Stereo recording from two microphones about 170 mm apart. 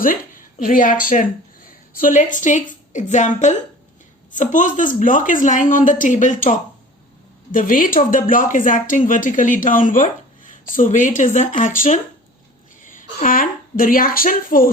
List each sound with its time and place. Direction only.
0.0 s speech: 55° left (ahead or behind)